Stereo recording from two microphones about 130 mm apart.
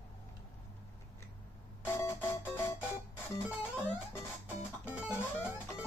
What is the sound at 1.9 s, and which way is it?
Music, 20° left (ahead or behind).